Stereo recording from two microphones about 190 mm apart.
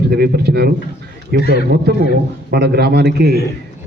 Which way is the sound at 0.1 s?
55° right (ahead or behind).